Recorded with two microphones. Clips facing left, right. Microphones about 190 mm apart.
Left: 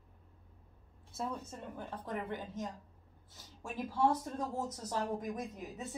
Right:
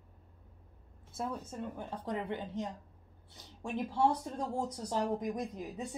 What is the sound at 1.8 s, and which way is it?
Speech, 20° right (ahead or behind).